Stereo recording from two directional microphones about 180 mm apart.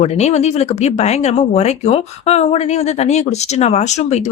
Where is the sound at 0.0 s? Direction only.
35° left (ahead or behind).